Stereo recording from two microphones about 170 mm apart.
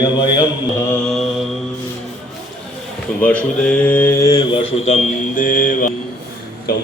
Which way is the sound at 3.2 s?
10° left (ahead or behind).